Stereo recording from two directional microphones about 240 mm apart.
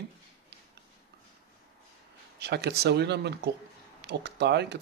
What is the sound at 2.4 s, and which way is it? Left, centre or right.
Speech, right.